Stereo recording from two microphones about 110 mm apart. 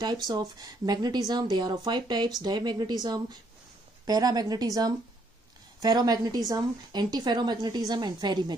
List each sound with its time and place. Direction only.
0.3 s a woman's voice: 35° right (ahead or behind)